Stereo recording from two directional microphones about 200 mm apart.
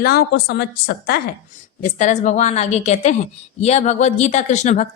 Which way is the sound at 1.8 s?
35° left (ahead or behind).